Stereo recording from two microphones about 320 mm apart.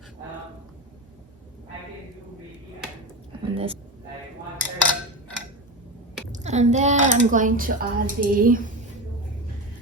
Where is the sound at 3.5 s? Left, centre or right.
Centre.